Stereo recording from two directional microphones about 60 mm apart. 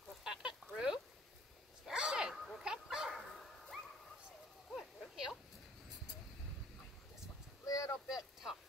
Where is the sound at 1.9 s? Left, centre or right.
Centre.